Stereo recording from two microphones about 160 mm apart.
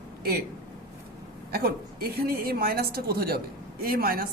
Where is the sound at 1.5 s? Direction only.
75° right (ahead or behind).